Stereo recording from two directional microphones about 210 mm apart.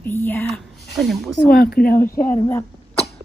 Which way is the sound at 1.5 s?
45° left (ahead or behind).